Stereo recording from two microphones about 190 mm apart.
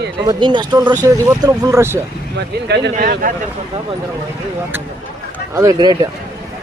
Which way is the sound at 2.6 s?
60° right (ahead or behind).